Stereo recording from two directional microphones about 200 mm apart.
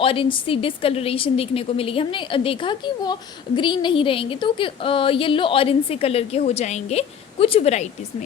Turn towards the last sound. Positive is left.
turn(degrees=35)  # may be behind; listen again after turning